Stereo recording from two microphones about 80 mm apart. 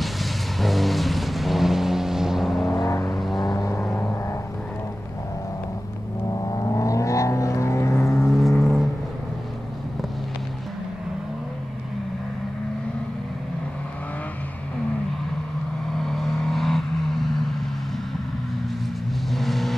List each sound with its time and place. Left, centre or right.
0.0 s vehicle: centre
2.8 s vehicle: left
3.9 s vehicle: left
6.3 s vehicle: left
8.3 s vehicle: centre
15.9 s vehicle: centre
19.3 s vehicle: centre